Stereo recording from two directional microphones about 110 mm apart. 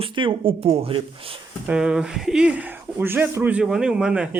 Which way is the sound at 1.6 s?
5° right (ahead or behind).